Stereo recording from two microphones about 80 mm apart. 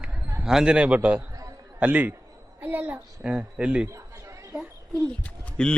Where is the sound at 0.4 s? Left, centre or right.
Centre.